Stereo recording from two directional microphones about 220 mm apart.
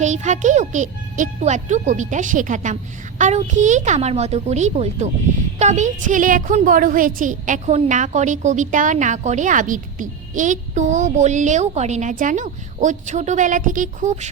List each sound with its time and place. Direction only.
0.0 s a woman's voice: 30° right (ahead or behind)